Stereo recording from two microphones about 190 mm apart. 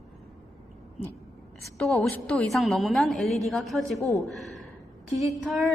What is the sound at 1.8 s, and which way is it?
A woman's voice, centre (ahead or behind).